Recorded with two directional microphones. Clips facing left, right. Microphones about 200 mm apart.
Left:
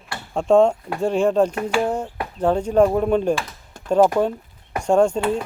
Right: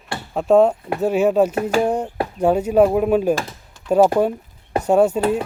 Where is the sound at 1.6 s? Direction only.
40° right (ahead or behind).